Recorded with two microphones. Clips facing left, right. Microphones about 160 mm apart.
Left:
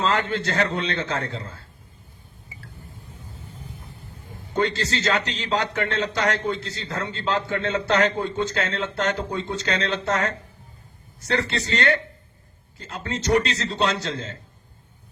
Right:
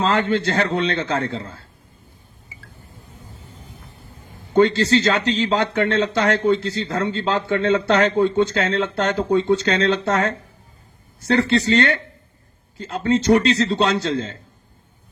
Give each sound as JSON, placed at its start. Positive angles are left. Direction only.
{"t": 0.0, "sound": "speech", "side_deg": -30}
{"t": 4.5, "sound": "speech", "side_deg": -30}
{"t": 13.1, "sound": "speech", "side_deg": -30}